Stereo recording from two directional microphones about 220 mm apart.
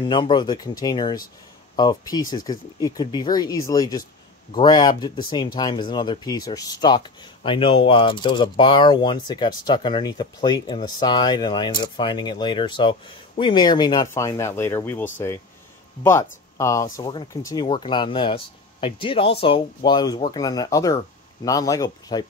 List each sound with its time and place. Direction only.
0.0 s speech: 20° left (ahead or behind)